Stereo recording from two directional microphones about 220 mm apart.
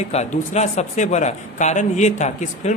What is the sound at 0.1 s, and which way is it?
Speech, 30° left (ahead or behind).